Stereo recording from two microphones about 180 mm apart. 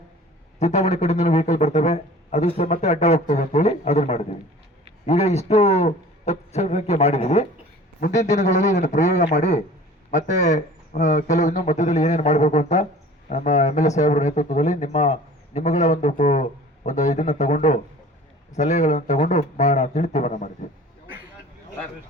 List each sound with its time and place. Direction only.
0.6 s speech: 40° left (ahead or behind)